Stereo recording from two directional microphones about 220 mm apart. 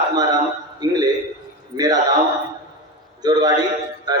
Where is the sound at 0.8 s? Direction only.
15° right (ahead or behind).